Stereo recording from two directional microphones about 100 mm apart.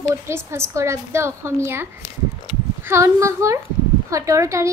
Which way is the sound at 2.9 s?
30° right (ahead or behind).